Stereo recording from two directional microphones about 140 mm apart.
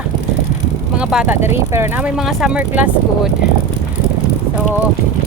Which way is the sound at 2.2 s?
5° right (ahead or behind).